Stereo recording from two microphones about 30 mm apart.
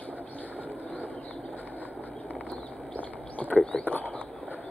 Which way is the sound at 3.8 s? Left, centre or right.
Left.